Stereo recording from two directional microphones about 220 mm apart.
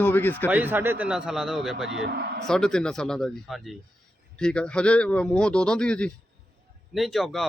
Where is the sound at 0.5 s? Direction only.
10° right (ahead or behind).